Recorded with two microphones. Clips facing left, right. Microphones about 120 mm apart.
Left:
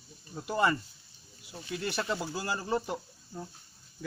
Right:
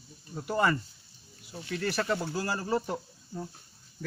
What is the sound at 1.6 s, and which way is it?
Speech, 20° left (ahead or behind).